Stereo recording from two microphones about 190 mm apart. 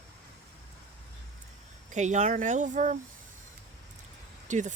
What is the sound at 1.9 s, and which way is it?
Speech, 40° right (ahead or behind).